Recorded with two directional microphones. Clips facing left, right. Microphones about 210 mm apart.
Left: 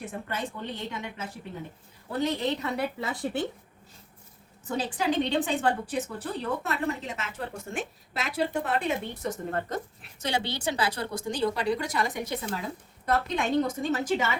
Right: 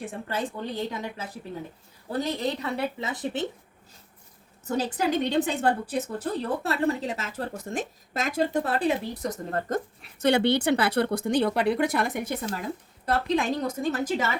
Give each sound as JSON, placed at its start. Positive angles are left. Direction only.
{"t": 0.0, "sound": "a woman's voice", "side_deg": -30}
{"t": 3.0, "sound": "speech", "side_deg": -20}
{"t": 4.6, "sound": "a woman's voice", "side_deg": -40}
{"t": 10.2, "sound": "a woman's voice", "side_deg": -60}
{"t": 13.1, "sound": "a woman's voice", "side_deg": -35}